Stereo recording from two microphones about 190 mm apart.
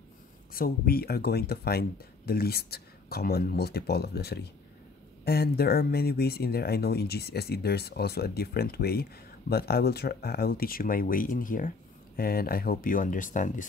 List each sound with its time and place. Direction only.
0.5 s speech: 50° left (ahead or behind)